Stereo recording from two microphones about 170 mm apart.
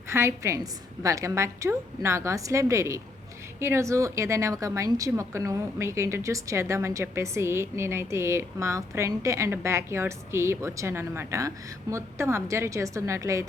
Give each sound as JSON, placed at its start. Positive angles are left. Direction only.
{"t": 0.1, "sound": "a woman's voice", "side_deg": -15}